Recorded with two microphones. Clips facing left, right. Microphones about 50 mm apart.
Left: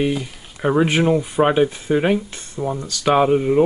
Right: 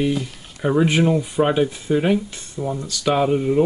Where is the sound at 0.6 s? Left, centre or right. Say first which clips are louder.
Left 1 dB; centre.